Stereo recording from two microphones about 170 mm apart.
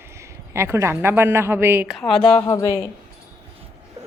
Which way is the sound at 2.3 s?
15° left (ahead or behind).